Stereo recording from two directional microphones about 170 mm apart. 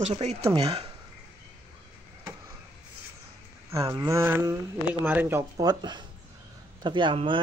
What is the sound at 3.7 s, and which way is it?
Speech, 20° right (ahead or behind).